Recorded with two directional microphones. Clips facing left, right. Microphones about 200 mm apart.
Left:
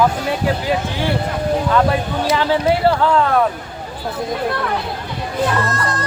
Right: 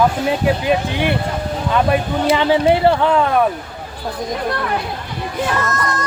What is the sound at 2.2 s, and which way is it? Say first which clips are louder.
Speech: right 3 dB; 20° right (ahead or behind).